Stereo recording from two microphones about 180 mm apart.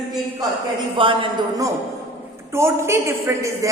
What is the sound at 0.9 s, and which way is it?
A woman's voice, 30° right (ahead or behind).